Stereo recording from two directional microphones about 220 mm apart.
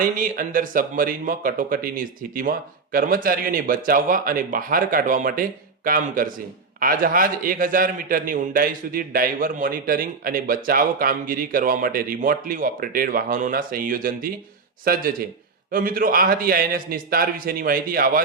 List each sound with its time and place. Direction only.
0.0 s a man's voice: 40° right (ahead or behind)